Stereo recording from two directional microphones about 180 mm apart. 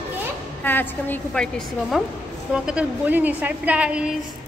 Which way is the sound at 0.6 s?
10° left (ahead or behind).